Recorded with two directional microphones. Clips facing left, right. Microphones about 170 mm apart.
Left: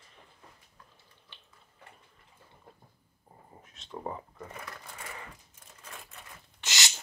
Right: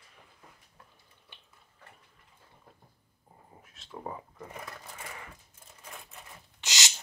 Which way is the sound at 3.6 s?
5° right (ahead or behind).